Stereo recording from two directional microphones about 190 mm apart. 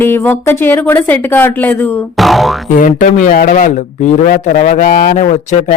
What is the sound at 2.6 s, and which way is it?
Speech, 45° left (ahead or behind).